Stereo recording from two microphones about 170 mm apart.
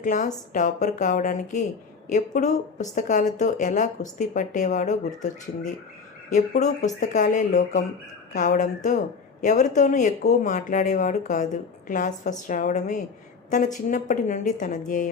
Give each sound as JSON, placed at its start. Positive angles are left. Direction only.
{"t": 0.0, "sound": "a woman's voice", "side_deg": 50}